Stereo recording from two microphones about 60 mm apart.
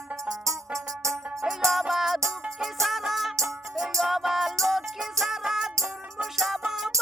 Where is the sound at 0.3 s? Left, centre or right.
Right.